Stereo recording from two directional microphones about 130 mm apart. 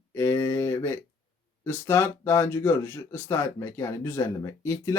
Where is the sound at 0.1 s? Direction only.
20° left (ahead or behind).